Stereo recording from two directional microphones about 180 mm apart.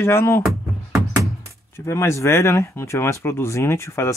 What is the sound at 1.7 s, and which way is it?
Speech, 15° left (ahead or behind).